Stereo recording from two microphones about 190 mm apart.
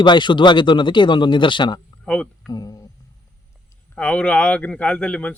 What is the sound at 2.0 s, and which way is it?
Speech, 5° left (ahead or behind).